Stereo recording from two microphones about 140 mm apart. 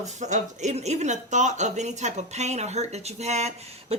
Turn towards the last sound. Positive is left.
turn(degrees=-50)  # may be behind; listen again after turning